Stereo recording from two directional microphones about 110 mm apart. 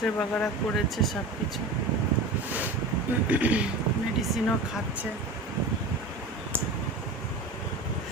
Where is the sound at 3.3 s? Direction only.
15° right (ahead or behind).